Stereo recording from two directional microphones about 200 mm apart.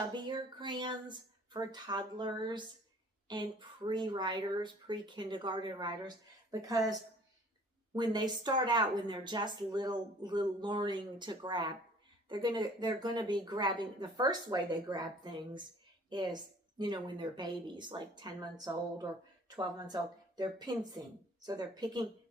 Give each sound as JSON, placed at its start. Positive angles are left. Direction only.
{"t": 0.1, "sound": "speech", "side_deg": -20}
{"t": 7.9, "sound": "speech", "side_deg": -20}